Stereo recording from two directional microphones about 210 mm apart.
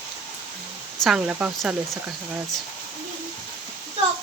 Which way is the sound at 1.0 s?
5° right (ahead or behind).